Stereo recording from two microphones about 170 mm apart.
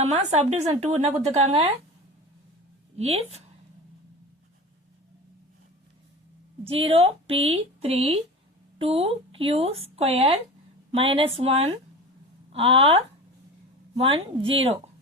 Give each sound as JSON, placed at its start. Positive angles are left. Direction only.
{"t": 0.0, "sound": "a woman's voice", "side_deg": -40}
{"t": 3.0, "sound": "a woman's voice", "side_deg": -35}
{"t": 6.7, "sound": "a woman's voice", "side_deg": -35}